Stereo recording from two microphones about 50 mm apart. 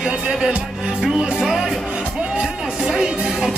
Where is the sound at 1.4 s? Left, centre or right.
Centre.